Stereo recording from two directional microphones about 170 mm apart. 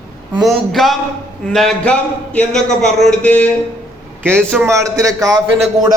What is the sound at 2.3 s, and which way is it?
Speech, 5° left (ahead or behind).